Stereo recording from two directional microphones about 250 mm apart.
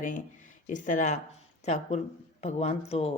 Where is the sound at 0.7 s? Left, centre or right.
Left.